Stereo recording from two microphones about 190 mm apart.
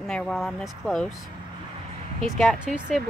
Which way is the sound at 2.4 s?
Centre (ahead or behind).